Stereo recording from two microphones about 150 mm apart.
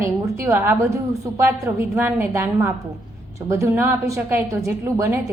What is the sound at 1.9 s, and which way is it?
A woman's voice, 15° right (ahead or behind).